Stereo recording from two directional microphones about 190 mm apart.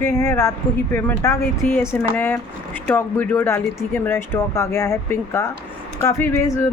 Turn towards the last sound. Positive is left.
turn(degrees=15)  # may be behind; listen again after turning